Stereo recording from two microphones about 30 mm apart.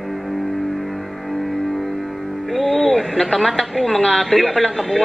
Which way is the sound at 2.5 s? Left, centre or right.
Centre.